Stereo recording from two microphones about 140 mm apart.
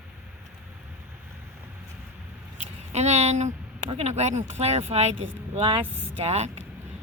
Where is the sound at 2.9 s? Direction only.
50° right (ahead or behind).